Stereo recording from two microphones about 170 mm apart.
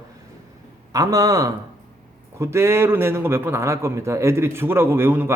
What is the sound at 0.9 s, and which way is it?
A man's voice, 20° right (ahead or behind).